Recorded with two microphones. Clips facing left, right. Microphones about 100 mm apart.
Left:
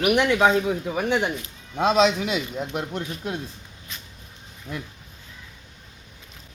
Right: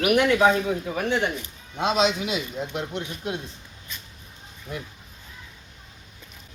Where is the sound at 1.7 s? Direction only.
40° left (ahead or behind).